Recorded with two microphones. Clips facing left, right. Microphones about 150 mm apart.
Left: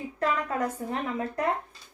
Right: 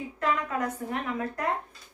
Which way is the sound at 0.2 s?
35° left (ahead or behind).